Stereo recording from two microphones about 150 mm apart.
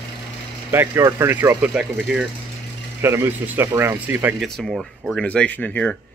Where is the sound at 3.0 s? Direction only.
15° right (ahead or behind).